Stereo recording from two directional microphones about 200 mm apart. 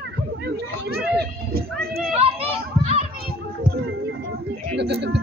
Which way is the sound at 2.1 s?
30° right (ahead or behind).